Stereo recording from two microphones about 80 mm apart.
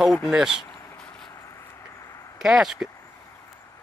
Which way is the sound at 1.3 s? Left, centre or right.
Left.